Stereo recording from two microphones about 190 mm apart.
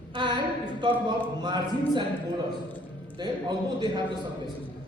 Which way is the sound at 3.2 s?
25° right (ahead or behind).